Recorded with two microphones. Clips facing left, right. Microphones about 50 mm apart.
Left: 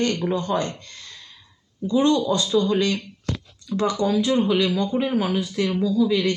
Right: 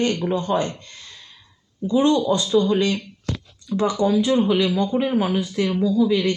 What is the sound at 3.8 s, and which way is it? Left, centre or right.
Speech, centre.